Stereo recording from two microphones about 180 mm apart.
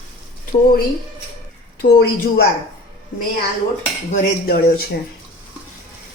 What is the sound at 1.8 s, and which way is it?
Speech, 60° left (ahead or behind).